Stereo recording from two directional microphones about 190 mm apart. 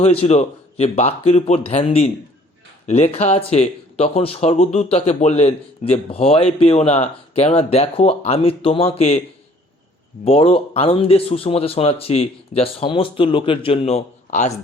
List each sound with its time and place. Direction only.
0.0 s speech: 35° left (ahead or behind)
10.2 s speech: 30° left (ahead or behind)